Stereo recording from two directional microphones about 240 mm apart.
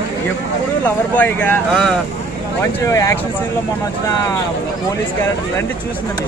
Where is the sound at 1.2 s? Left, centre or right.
Centre.